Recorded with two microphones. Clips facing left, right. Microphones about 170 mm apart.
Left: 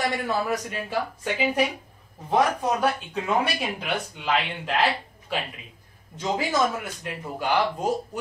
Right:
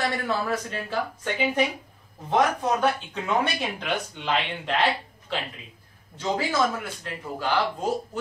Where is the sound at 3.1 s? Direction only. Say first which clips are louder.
Left 1 dB; 5° left (ahead or behind).